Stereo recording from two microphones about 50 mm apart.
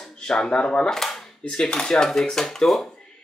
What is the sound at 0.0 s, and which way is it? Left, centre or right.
Speech, centre.